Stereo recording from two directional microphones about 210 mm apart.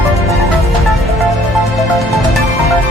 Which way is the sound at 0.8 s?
Centre (ahead or behind).